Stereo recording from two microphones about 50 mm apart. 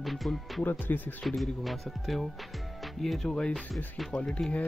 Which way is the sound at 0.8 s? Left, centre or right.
Left.